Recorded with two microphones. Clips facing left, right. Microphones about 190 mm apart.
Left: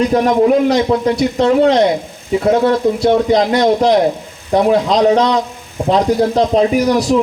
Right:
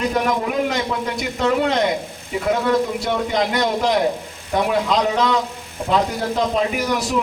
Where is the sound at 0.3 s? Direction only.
35° left (ahead or behind).